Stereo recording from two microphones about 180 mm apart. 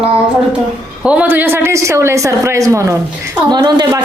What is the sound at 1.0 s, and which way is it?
Speech, 5° right (ahead or behind).